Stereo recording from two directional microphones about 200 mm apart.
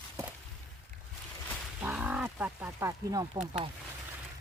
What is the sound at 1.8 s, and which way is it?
Speech, 5° right (ahead or behind).